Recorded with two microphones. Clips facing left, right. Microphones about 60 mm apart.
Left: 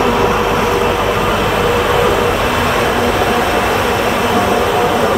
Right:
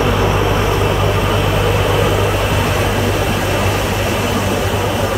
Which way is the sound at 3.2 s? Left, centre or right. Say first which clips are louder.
Left 4 dB; left.